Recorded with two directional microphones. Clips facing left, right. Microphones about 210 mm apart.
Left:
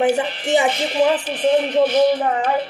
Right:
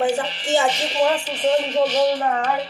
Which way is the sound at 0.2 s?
55° left (ahead or behind).